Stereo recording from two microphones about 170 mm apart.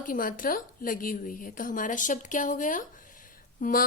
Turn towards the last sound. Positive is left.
turn(degrees=55)  # may be behind; listen again after turning